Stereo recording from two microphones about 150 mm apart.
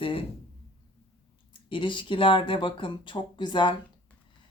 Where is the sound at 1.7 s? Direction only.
35° left (ahead or behind).